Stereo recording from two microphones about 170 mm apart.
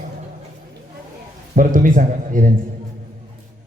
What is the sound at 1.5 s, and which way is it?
Speech, 50° right (ahead or behind).